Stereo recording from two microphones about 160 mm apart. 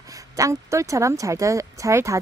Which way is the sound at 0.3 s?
20° right (ahead or behind).